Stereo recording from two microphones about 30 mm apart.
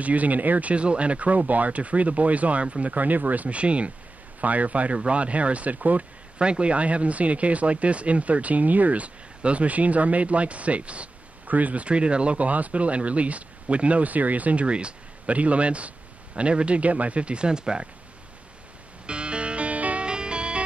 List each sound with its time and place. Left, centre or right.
0.0 s speech: right
2.6 s speech: right
3.0 s speech: right
3.4 s speech: right
4.4 s speech: right
6.3 s speech: right
11.4 s speech: right
11.8 s speech: right
12.4 s speech: right
15.2 s speech: right
19.0 s music: right
20.0 s music: right